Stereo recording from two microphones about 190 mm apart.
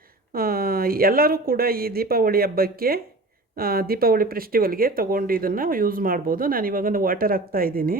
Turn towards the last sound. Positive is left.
turn(degrees=-50)  # may be behind; listen again after turning